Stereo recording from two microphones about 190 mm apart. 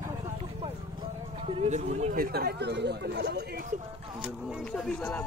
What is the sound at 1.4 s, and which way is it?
Speech, 35° right (ahead or behind).